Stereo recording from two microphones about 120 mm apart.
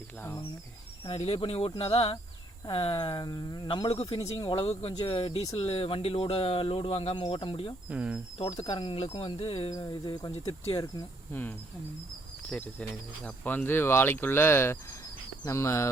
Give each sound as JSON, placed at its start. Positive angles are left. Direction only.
{"t": 0.2, "sound": "speech", "side_deg": 20}
{"t": 1.0, "sound": "speech", "side_deg": 55}
{"t": 2.6, "sound": "speech", "side_deg": 40}
{"t": 7.9, "sound": "speech", "side_deg": -10}
{"t": 8.6, "sound": "speech", "side_deg": 45}
{"t": 9.7, "sound": "speech", "side_deg": 40}
{"t": 12.8, "sound": "speech", "side_deg": 10}